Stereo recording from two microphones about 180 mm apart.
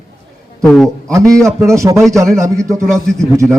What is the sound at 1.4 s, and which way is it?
A man's voice, 15° right (ahead or behind).